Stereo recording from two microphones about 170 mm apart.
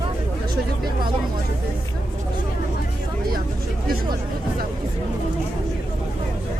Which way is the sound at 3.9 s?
60° right (ahead or behind).